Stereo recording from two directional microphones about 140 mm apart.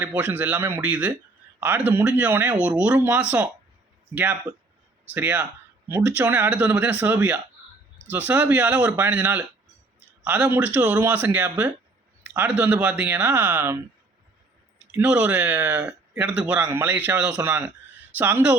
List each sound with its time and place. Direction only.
0.0 s speech: 10° right (ahead or behind)
14.9 s speech: 10° right (ahead or behind)